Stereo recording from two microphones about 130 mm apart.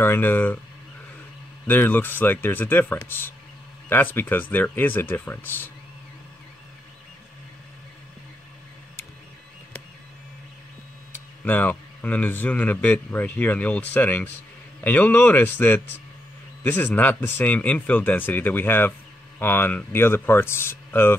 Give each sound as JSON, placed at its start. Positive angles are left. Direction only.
{"t": 0.0, "sound": "a man's voice", "side_deg": 15}
{"t": 1.7, "sound": "a man's voice", "side_deg": 15}
{"t": 11.4, "sound": "a man's voice", "side_deg": 15}